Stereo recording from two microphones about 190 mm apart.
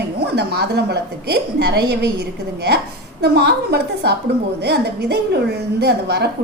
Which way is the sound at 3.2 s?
60° right (ahead or behind).